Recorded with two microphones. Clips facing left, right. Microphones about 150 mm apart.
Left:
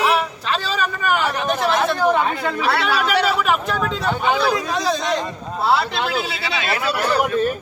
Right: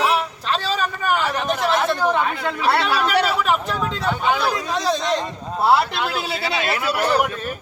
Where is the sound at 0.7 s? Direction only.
Centre (ahead or behind).